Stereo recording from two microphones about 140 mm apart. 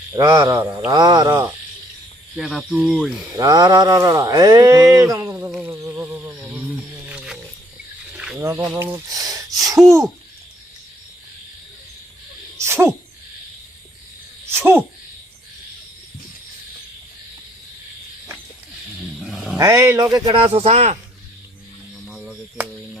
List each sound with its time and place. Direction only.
0.1 s a sound: 35° right (ahead or behind)
2.3 s speech: centre (ahead or behind)
3.3 s speech: 25° right (ahead or behind)
5.5 s humming: 10° right (ahead or behind)
8.1 s wild animals: 5° right (ahead or behind)
8.4 s speech: 20° right (ahead or behind)
8.7 s a sound: 15° right (ahead or behind)
9.8 s speech: 20° right (ahead or behind)
12.5 s sneeze: 20° right (ahead or behind)
14.5 s speech: 15° right (ahead or behind)
19.2 s a sound: centre (ahead or behind)
19.5 s speech: 25° right (ahead or behind); by 21.0 s 55° right (ahead or behind)
22.0 s cricket: 5° right (ahead or behind)